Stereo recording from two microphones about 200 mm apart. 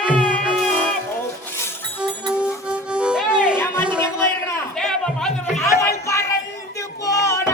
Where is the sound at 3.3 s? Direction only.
5° right (ahead or behind).